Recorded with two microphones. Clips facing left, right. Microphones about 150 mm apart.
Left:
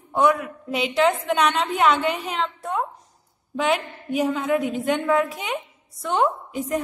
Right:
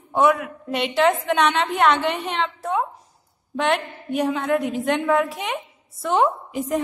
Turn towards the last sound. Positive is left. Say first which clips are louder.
# right 1 dB
turn(degrees=0)  # may be behind; listen again after turning